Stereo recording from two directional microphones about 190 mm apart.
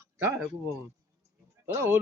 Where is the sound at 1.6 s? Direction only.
15° right (ahead or behind).